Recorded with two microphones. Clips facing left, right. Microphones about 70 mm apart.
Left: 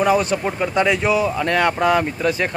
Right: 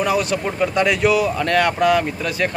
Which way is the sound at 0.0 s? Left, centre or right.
Left.